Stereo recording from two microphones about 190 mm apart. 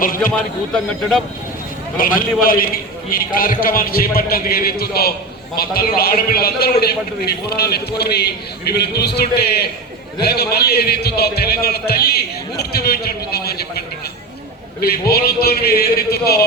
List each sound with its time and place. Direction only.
0.0 s a man's voice: 45° left (ahead or behind)
0.3 s speech: 5° left (ahead or behind)
2.0 s a man's voice: 45° left (ahead or behind)